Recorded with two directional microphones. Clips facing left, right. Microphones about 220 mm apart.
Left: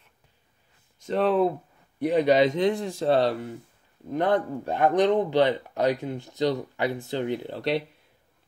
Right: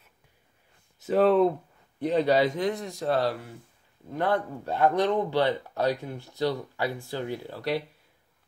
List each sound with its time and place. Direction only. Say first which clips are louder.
0.9 s speech: right 2 dB; 5° right (ahead or behind)
2.0 s speech: left 3 dB; 15° left (ahead or behind)